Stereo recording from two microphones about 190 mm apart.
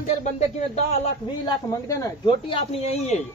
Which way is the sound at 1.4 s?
20° left (ahead or behind).